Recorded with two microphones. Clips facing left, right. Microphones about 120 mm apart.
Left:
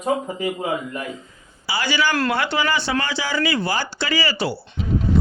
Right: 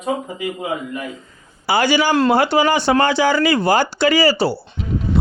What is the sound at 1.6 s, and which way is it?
Speech, 50° right (ahead or behind).